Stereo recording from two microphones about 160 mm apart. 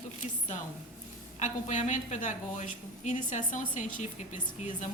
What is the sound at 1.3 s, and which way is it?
A woman's voice, 50° left (ahead or behind).